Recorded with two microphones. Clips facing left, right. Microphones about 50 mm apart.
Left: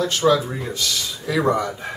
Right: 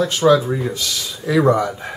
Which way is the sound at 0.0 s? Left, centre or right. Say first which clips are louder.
Right 4 dB; centre.